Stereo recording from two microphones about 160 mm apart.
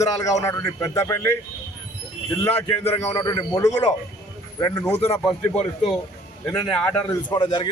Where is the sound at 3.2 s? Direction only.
25° left (ahead or behind).